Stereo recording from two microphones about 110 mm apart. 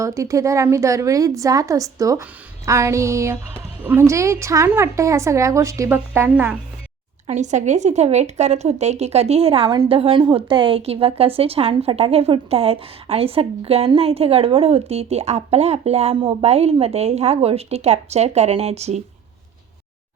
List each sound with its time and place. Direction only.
0.0 s a woman's voice: 30° right (ahead or behind); by 6.6 s 15° right (ahead or behind)
7.3 s a woman's voice: 90° right